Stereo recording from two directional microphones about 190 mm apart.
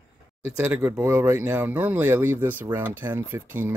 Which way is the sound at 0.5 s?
10° right (ahead or behind).